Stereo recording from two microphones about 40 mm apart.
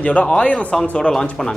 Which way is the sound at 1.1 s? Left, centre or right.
Centre.